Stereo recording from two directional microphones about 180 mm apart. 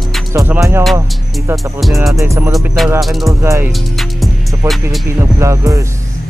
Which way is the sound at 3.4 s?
15° right (ahead or behind).